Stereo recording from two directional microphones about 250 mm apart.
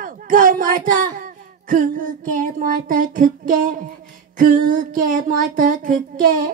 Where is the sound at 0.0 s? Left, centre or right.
Right.